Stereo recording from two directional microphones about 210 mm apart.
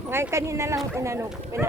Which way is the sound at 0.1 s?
10° right (ahead or behind).